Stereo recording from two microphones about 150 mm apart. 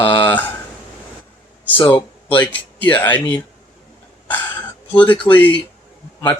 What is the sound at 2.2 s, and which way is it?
Speech, 10° left (ahead or behind).